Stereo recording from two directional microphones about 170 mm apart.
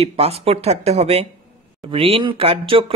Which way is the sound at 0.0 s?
35° right (ahead or behind).